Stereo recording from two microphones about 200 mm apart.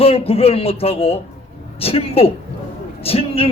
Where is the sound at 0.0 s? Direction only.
30° left (ahead or behind).